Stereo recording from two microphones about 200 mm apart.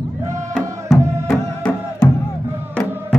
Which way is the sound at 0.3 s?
5° right (ahead or behind).